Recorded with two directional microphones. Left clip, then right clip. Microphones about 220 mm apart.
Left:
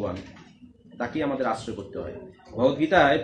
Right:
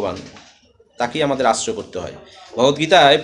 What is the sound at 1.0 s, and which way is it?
Speech, 40° right (ahead or behind).